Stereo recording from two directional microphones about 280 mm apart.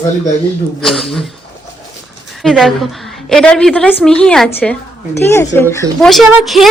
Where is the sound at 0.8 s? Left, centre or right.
Centre.